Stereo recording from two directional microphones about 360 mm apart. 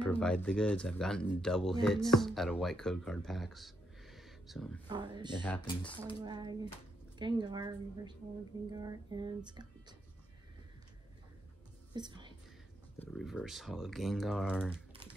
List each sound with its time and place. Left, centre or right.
0.0 s speech: centre
4.8 s speech: centre
5.4 s speech: centre
6.2 s speech: centre
11.9 s speech: centre
13.0 s speech: centre